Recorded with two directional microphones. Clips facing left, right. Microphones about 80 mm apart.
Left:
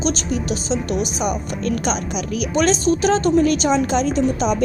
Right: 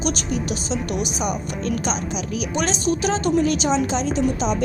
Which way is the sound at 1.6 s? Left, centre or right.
Left.